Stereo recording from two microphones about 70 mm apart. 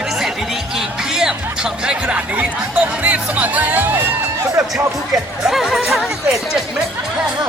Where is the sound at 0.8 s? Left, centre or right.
Centre; by 3.9 s right.